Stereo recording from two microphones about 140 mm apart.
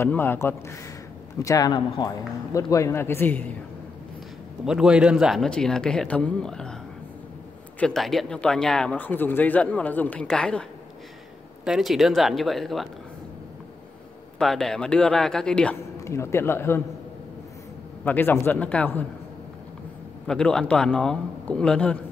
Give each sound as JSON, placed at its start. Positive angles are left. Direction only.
{"t": 0.0, "sound": "a man's voice", "side_deg": 15}
{"t": 4.6, "sound": "speech", "side_deg": -5}
{"t": 7.8, "sound": "speech", "side_deg": 0}
{"t": 11.6, "sound": "speech", "side_deg": 0}
{"t": 14.4, "sound": "speech", "side_deg": 5}
{"t": 16.0, "sound": "speech", "side_deg": 20}
{"t": 18.0, "sound": "speech", "side_deg": 15}
{"t": 20.2, "sound": "speech", "side_deg": 5}